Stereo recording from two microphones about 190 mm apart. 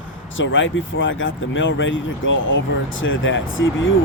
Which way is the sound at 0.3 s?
80° left.